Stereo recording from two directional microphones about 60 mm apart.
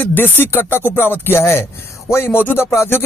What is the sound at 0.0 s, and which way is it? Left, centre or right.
Speech, left.